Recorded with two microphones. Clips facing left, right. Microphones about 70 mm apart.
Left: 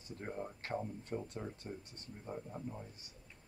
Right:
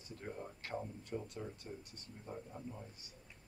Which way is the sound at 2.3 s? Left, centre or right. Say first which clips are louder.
Left 3 dB; centre.